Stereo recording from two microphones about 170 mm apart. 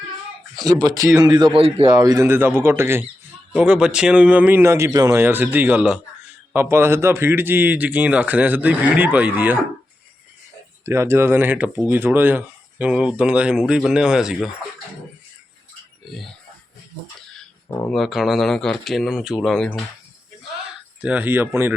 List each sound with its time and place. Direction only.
0.5 s speech: 25° right (ahead or behind)
2.0 s speech: 20° right (ahead or behind)
10.8 s speech: 15° right (ahead or behind)
17.8 s speech: centre (ahead or behind)
21.0 s speech: 10° right (ahead or behind)